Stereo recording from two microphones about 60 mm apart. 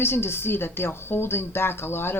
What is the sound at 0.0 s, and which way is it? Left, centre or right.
A woman's voice, left.